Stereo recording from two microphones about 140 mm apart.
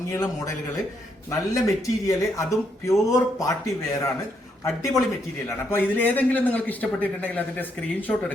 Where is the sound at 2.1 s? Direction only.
20° left (ahead or behind).